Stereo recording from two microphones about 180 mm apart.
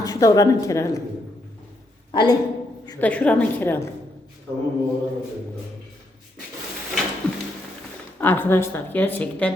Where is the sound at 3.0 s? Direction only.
5° left (ahead or behind).